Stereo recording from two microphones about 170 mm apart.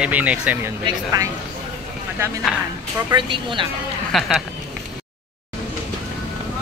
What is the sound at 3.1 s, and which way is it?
Speech, 30° right (ahead or behind).